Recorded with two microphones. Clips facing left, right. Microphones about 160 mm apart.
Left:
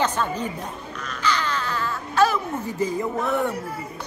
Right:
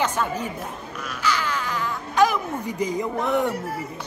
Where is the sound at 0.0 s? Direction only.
10° right (ahead or behind).